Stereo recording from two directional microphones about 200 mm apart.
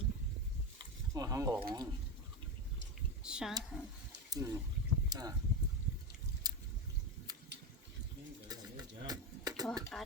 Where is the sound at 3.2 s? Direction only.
5° right (ahead or behind).